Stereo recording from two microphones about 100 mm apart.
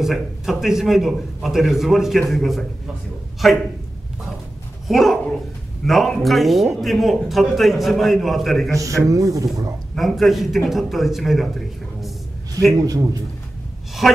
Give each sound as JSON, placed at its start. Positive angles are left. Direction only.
{"t": 0.0, "sound": "a man's voice", "side_deg": 0}
{"t": 4.8, "sound": "a man's voice", "side_deg": 0}
{"t": 8.7, "sound": "a man's voice", "side_deg": -35}
{"t": 9.9, "sound": "a man's voice", "side_deg": 0}
{"t": 12.7, "sound": "a man's voice", "side_deg": -35}
{"t": 14.0, "sound": "a man's voice", "side_deg": 5}